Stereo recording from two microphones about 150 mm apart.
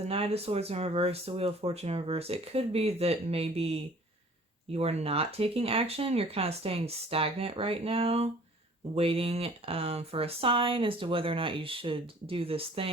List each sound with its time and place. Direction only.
0.1 s speech: 40° right (ahead or behind)